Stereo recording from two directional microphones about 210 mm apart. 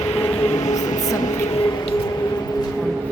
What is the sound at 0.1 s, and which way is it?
Train, 10° left (ahead or behind).